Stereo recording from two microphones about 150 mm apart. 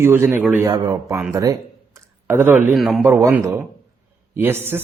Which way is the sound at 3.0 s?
20° right (ahead or behind).